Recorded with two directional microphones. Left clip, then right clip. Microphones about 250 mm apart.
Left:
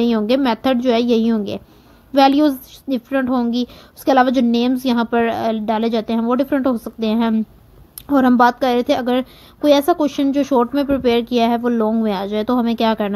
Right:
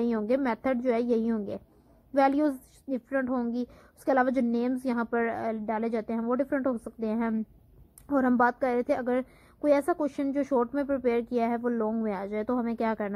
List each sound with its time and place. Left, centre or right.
0.1 s a woman's voice: left